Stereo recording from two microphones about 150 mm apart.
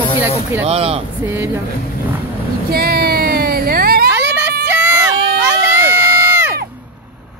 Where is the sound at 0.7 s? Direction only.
40° right (ahead or behind).